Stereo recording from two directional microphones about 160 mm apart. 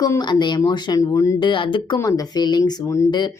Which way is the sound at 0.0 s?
25° left (ahead or behind).